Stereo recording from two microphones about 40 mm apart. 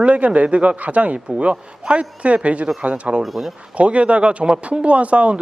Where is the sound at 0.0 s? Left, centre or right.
Right.